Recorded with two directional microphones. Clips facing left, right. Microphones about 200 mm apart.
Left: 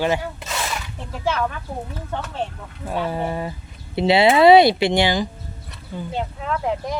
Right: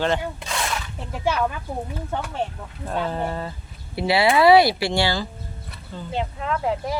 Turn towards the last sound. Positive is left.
turn(degrees=0)  # may be behind; listen again after turning